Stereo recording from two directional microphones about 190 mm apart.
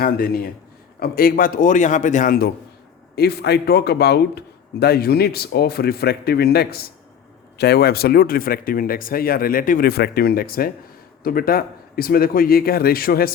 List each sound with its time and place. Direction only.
0.0 s speech: 50° left (ahead or behind)
3.2 s speech: 60° left (ahead or behind)